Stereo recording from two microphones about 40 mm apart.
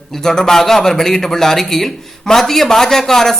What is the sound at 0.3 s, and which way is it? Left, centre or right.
Speech, centre.